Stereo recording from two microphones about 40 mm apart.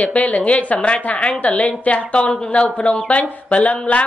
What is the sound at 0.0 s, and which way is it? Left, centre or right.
Speech, left.